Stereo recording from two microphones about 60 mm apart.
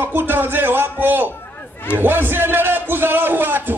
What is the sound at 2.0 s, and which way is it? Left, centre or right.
A man's voice, right.